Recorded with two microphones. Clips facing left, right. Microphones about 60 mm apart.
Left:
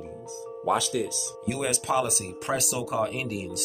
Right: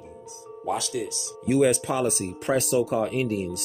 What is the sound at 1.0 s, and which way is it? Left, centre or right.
Speech, left.